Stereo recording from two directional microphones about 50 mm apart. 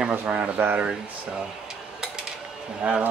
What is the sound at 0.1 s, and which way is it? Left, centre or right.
Speech, right.